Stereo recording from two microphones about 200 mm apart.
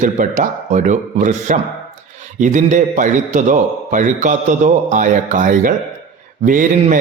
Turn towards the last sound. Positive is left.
turn(degrees=-40)  # may be behind; listen again after turning